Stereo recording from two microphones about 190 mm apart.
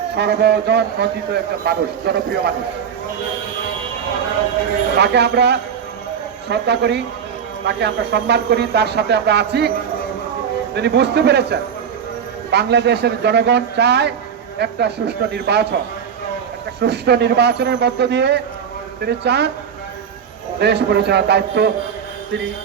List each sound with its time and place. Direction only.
0.2 s a man's voice: 60° right (ahead or behind)
4.9 s a man's voice: 60° right (ahead or behind)
10.8 s a man's voice: 60° right (ahead or behind)
16.8 s a man's voice: 60° right (ahead or behind)
20.6 s a man's voice: 60° right (ahead or behind)